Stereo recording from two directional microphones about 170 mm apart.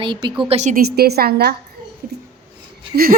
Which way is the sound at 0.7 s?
65° right (ahead or behind).